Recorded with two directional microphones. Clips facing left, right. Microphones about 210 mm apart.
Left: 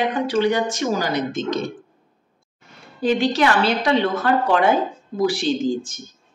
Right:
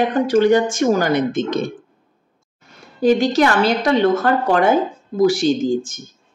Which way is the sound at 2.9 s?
45° right (ahead or behind).